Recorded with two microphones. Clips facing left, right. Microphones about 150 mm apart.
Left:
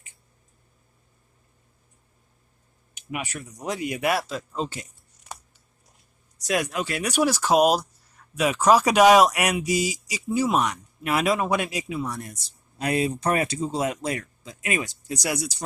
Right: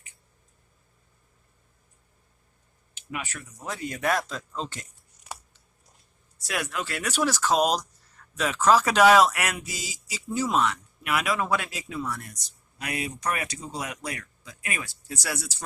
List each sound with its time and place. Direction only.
2.9 s speech: 15° left (ahead or behind)
6.4 s speech: 20° left (ahead or behind)
11.0 s a man's voice: 25° left (ahead or behind)